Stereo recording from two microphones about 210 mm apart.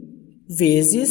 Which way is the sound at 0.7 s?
60° left (ahead or behind).